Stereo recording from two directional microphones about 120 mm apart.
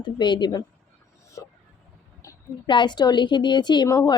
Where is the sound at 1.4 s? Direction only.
25° left (ahead or behind).